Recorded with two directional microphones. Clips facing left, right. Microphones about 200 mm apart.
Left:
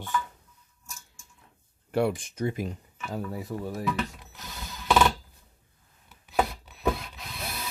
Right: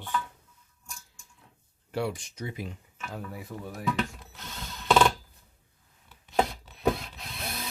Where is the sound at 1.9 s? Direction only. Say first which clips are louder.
Left 5 dB; 55° left (ahead or behind).